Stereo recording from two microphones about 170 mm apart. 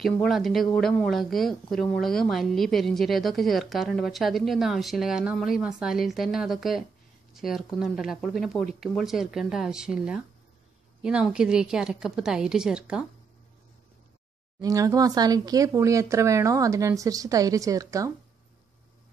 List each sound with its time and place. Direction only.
0.0 s a woman's voice: centre (ahead or behind)
14.6 s speech: 20° right (ahead or behind)